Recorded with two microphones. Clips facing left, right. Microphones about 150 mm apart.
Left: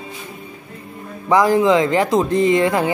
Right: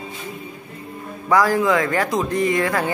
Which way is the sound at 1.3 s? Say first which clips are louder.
Left 3 dB; 20° left (ahead or behind).